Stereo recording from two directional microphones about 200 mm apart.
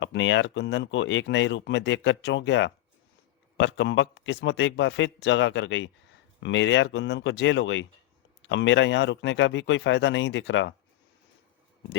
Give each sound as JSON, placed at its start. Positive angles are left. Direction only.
{"t": 0.0, "sound": "speech", "side_deg": 65}